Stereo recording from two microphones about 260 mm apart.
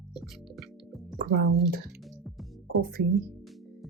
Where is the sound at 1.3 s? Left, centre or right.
Right.